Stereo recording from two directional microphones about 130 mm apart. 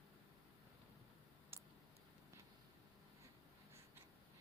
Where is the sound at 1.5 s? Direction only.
20° right (ahead or behind).